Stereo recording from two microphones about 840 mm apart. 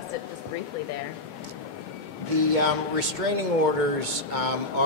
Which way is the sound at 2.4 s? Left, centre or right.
Right.